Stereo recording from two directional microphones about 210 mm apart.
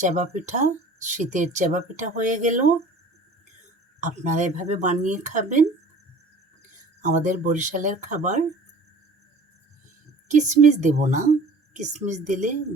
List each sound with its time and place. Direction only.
0.0 s speech: 35° right (ahead or behind)
4.0 s speech: 35° right (ahead or behind)
7.0 s speech: 35° right (ahead or behind)
10.2 s speech: 35° right (ahead or behind)